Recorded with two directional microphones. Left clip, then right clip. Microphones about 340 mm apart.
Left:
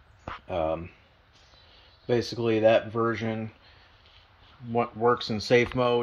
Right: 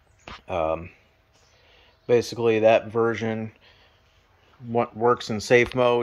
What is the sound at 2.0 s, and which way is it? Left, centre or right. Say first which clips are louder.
Speech: right 6 dB; right.